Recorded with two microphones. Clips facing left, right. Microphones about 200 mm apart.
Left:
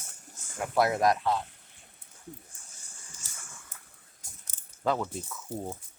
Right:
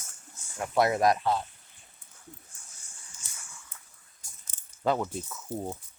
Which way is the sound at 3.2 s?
50° left (ahead or behind).